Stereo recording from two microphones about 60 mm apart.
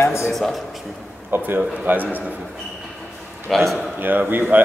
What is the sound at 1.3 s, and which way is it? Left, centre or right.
Speech, right.